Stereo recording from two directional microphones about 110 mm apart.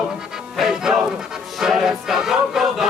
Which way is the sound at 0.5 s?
5° right (ahead or behind).